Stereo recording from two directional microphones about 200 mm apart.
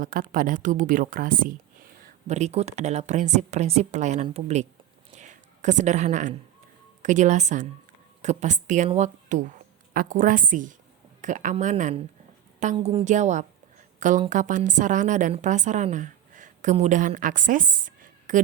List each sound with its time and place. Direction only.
0.0 s a woman's voice: 45° right (ahead or behind)
5.1 s a sound: 35° right (ahead or behind)
7.0 s a woman's voice: 40° right (ahead or behind)